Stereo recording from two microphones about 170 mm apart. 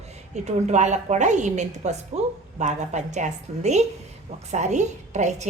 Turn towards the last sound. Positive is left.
turn(degrees=-45)  # may be behind; listen again after turning